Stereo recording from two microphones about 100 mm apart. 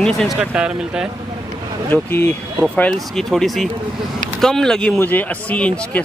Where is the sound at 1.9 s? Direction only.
20° left (ahead or behind).